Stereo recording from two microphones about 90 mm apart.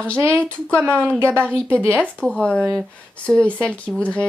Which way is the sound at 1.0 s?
25° right (ahead or behind).